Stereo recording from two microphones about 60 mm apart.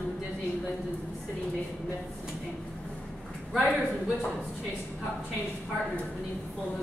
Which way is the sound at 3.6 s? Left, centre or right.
Left.